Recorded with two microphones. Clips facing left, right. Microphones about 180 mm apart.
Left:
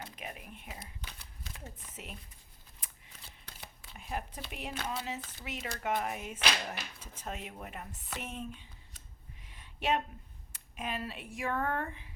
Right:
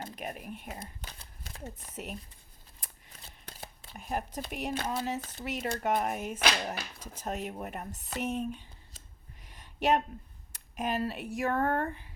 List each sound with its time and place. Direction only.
0.0 s whispering: 40° right (ahead or behind)
3.9 s speech: 45° right (ahead or behind)
9.4 s a sound: 40° right (ahead or behind)
10.5 s speech: 40° right (ahead or behind)